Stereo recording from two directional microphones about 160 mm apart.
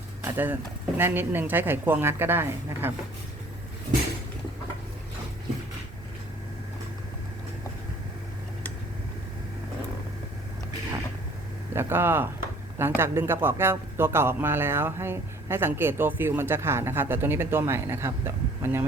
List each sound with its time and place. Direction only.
0.3 s speech: 10° right (ahead or behind)
11.7 s speech: 15° right (ahead or behind)